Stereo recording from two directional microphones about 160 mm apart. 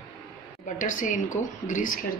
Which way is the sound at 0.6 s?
55° left (ahead or behind).